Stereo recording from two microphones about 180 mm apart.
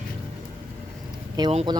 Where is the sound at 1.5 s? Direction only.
35° right (ahead or behind).